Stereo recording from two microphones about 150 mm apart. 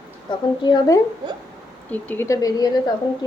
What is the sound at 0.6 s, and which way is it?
Speech, 30° left (ahead or behind).